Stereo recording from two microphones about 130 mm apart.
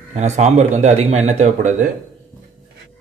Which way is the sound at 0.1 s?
60° right (ahead or behind).